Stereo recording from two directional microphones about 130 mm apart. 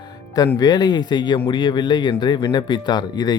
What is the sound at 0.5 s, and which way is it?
A man's voice, 30° left (ahead or behind).